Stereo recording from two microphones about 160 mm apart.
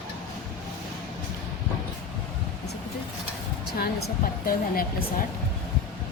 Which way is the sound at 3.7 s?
75° left (ahead or behind).